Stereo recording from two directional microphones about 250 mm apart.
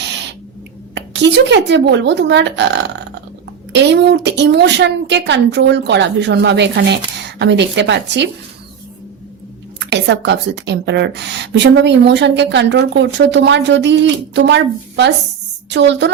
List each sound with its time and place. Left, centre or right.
0.9 s a woman's voice: right
9.8 s a woman's voice: right